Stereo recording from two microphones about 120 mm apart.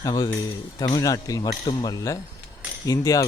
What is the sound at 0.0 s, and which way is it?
Speech, 35° left (ahead or behind).